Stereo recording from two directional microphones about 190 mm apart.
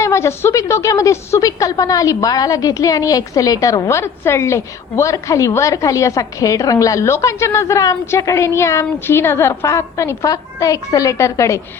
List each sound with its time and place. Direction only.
0.0 s a woman's voice: 15° left (ahead or behind)